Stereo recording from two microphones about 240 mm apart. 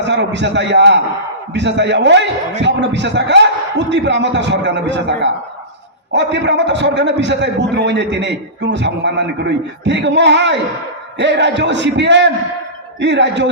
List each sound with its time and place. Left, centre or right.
0.0 s a man's voice: right